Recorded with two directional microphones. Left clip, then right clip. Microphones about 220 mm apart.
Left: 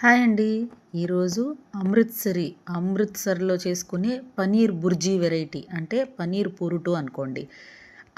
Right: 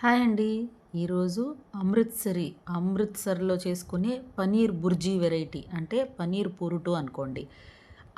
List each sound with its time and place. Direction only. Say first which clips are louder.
0.0 s a woman's voice: left 6 dB; 15° left (ahead or behind)